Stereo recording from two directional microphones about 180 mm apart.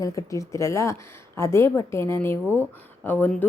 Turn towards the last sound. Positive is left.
turn(degrees=10)  # may be behind; listen again after turning